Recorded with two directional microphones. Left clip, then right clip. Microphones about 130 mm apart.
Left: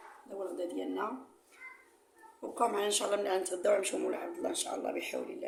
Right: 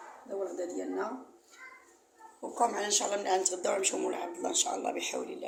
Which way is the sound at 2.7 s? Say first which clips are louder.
Even; 25° left (ahead or behind).